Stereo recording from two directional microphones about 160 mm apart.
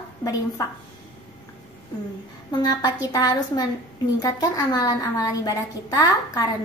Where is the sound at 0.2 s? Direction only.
20° left (ahead or behind).